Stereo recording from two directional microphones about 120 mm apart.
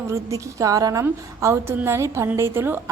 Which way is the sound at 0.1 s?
25° right (ahead or behind).